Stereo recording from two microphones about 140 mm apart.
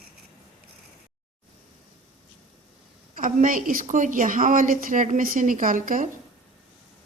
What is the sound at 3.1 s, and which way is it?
A woman's voice, 75° right (ahead or behind).